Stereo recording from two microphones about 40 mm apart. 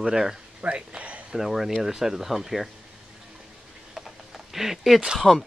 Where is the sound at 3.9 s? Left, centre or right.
Centre.